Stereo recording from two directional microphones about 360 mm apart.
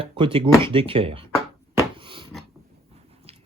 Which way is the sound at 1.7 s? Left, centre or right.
Centre.